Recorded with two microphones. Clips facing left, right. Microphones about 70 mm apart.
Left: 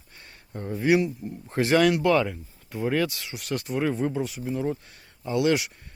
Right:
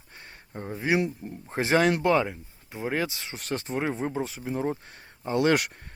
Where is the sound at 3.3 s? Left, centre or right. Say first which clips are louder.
Left 1 dB; right.